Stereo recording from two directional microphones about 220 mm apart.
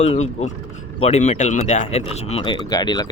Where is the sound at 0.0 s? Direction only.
30° left (ahead or behind).